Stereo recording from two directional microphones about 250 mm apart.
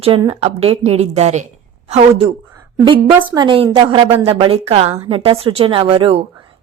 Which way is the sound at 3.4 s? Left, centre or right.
Centre.